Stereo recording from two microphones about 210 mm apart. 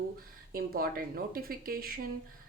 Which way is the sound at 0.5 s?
45° right (ahead or behind).